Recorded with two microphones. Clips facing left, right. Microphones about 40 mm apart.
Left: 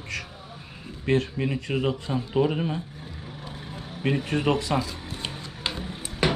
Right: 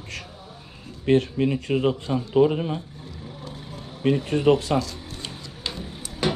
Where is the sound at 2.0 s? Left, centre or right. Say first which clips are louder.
Right 3 dB; centre.